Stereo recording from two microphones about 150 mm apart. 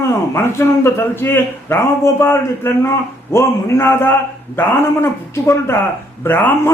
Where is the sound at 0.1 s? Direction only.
20° left (ahead or behind).